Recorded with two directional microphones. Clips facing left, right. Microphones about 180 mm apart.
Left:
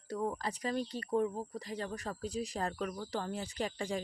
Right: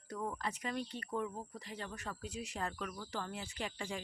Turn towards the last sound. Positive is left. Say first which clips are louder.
# left 6 dB
turn(degrees=40)  # may be behind; listen again after turning